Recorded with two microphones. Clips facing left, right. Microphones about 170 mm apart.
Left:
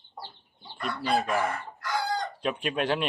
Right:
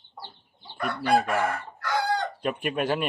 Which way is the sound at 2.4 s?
5° right (ahead or behind).